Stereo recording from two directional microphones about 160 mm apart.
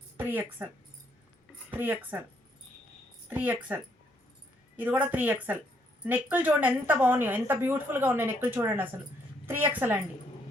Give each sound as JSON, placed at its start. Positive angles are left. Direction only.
{"t": 0.3, "sound": "a woman's voice", "side_deg": -10}
{"t": 1.7, "sound": "speech", "side_deg": -10}
{"t": 3.2, "sound": "a woman's voice", "side_deg": -10}
{"t": 4.8, "sound": "a woman's voice", "side_deg": -10}